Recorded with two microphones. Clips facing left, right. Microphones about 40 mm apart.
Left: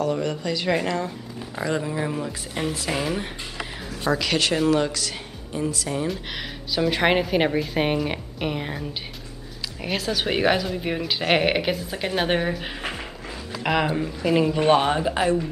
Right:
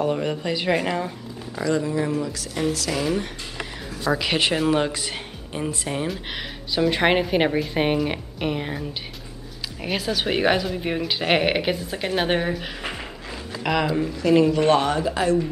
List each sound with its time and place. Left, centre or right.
0.0 s speech: right
1.5 s speech: left
4.1 s speech: centre
6.0 s a woman's voice: centre